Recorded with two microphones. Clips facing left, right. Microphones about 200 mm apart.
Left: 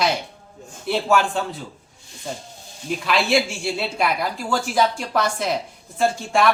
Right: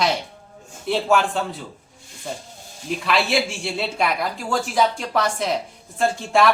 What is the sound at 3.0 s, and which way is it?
A woman's voice, centre (ahead or behind).